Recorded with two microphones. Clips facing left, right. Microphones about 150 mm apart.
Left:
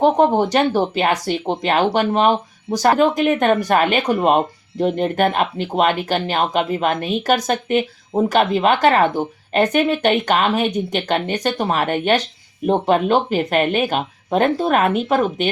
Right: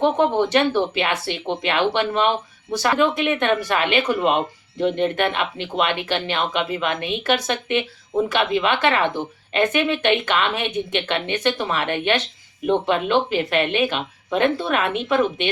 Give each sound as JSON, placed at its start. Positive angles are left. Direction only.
{"t": 0.0, "sound": "speech", "side_deg": 40}